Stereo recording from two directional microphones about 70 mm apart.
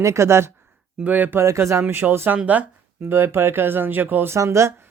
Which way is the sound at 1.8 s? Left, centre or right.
Right.